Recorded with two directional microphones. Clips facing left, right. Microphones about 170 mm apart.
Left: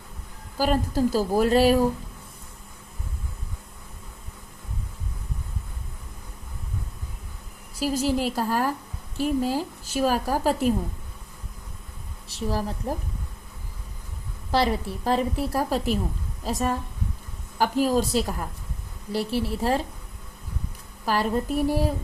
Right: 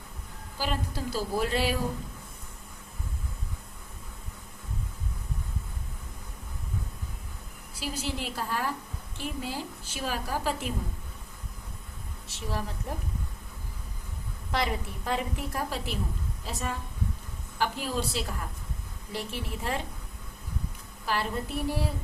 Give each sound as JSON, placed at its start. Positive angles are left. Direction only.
{"t": 0.5, "sound": "a woman's voice", "side_deg": 45}
{"t": 7.8, "sound": "speech", "side_deg": 40}
{"t": 12.3, "sound": "speech", "side_deg": 35}
{"t": 14.5, "sound": "speech", "side_deg": 35}
{"t": 21.0, "sound": "speech", "side_deg": 40}